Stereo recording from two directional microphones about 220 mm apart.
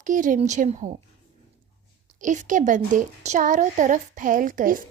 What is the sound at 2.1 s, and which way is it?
A woman's voice, 35° right (ahead or behind).